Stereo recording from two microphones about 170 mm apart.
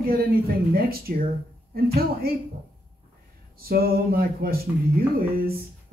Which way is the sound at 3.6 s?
60° right (ahead or behind).